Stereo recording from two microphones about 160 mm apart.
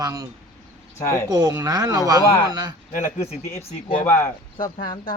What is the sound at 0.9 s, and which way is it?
Speech, 15° left (ahead or behind).